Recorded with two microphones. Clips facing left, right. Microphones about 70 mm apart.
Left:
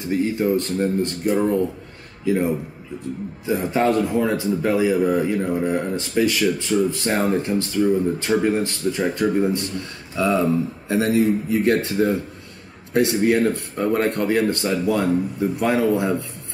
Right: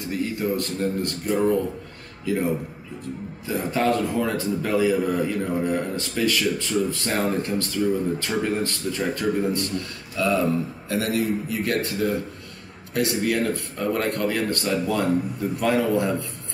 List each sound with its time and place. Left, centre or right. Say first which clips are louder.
0.0 s a man's voice: left 5 dB; left